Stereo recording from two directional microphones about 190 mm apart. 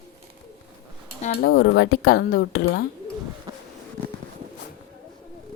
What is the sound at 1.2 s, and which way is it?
Speech, 55° left (ahead or behind).